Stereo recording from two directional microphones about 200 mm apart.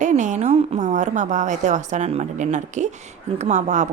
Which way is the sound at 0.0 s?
35° right (ahead or behind).